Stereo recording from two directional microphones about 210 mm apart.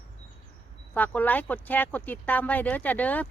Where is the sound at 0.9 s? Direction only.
10° left (ahead or behind).